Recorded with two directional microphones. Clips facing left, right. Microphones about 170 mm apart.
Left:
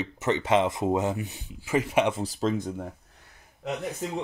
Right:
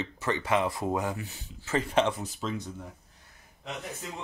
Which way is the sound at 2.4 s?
50° left (ahead or behind).